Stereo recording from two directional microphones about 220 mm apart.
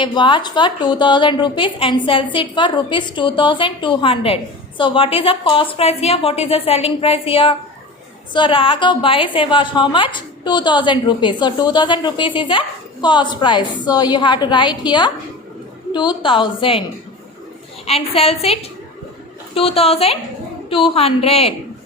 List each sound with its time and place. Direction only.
0.0 s a woman's voice: 20° left (ahead or behind)
17.8 s a woman's voice: 25° left (ahead or behind)